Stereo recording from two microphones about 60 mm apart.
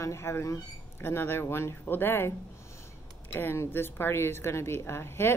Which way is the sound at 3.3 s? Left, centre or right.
Left.